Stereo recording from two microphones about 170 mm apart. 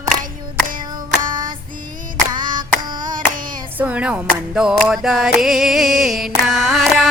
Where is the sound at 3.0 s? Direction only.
50° right (ahead or behind).